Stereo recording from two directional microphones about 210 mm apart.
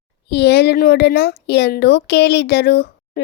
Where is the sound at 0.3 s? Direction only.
55° left (ahead or behind).